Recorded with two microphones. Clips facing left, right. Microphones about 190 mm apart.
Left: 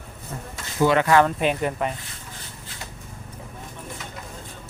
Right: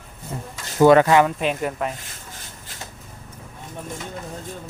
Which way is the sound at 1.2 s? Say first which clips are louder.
Even; centre (ahead or behind).